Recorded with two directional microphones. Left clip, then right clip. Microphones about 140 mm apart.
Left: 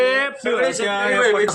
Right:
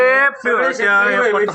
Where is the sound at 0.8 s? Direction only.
20° left (ahead or behind).